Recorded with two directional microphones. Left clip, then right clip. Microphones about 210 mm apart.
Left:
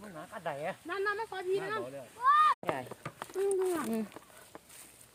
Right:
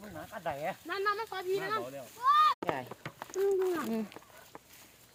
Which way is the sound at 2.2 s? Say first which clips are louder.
Even; 20° right (ahead or behind).